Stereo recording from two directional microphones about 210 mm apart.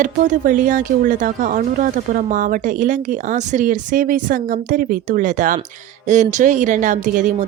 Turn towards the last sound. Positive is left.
turn(degrees=-35)  # may be behind; listen again after turning